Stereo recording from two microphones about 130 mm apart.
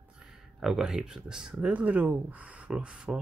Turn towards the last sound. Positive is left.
turn(degrees=-5)  # may be behind; listen again after turning